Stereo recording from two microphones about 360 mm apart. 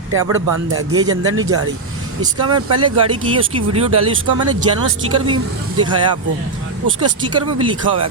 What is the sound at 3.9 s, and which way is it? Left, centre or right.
Speech, right.